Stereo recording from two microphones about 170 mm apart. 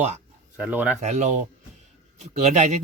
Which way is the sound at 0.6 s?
10° right (ahead or behind).